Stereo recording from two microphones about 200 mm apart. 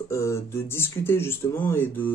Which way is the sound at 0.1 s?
15° left (ahead or behind).